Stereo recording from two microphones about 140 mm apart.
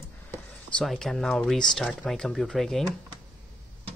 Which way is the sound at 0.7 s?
Centre (ahead or behind).